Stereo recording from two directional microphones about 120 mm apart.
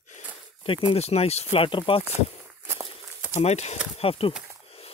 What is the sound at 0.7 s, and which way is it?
Speech, 55° left (ahead or behind).